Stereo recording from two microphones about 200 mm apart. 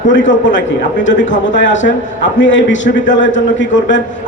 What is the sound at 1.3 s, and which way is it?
A man's voice, 65° left (ahead or behind).